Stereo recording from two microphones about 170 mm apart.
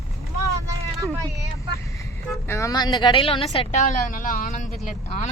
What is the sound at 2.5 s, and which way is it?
A woman's voice, 20° left (ahead or behind).